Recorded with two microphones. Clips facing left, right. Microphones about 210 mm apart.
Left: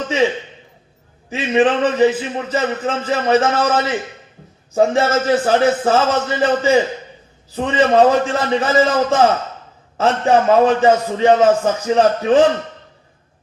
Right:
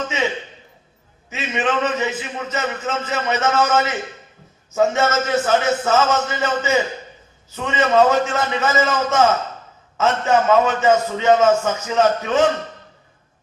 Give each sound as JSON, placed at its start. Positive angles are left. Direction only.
{"t": 1.3, "sound": "a man's voice", "side_deg": 35}